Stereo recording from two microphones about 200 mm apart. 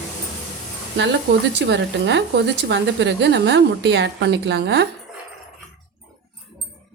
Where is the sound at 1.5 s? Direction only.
60° right (ahead or behind).